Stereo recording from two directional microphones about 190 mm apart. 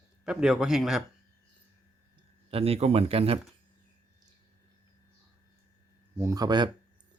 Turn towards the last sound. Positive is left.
turn(degrees=-20)  # may be behind; listen again after turning